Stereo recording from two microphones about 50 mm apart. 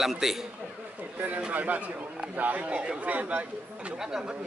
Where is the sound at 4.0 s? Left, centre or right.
Centre.